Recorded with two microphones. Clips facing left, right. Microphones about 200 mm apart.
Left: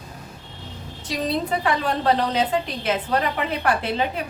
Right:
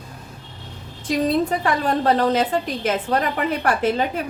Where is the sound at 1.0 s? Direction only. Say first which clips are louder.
Right 5 dB; 45° right (ahead or behind).